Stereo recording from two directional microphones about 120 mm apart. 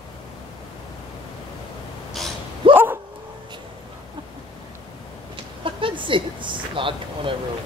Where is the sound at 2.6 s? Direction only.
45° right (ahead or behind).